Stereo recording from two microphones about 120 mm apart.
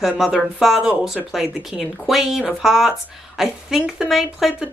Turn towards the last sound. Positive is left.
turn(degrees=-5)  # may be behind; listen again after turning